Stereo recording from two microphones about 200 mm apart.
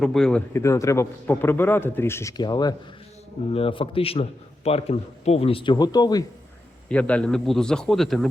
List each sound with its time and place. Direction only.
0.0 s a man's voice: 5° left (ahead or behind); by 6.2 s 20° left (ahead or behind)
6.8 s a man's voice: 5° left (ahead or behind)